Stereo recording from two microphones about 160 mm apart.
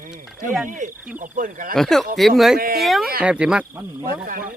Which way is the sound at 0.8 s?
50° right (ahead or behind).